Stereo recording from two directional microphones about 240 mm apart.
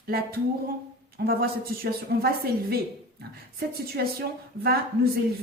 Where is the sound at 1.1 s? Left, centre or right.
Right.